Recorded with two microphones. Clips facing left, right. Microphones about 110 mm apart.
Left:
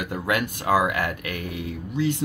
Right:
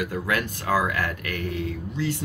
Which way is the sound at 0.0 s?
20° left (ahead or behind).